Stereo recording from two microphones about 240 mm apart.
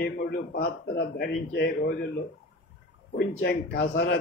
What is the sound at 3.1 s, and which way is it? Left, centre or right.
Speech, left.